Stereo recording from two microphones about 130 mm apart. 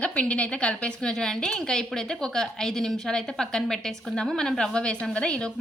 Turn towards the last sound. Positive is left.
turn(degrees=5)  # may be behind; listen again after turning